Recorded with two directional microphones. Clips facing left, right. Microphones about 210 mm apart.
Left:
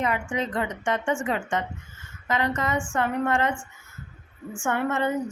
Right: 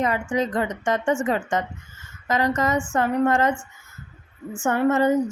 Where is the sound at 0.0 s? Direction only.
40° right (ahead or behind).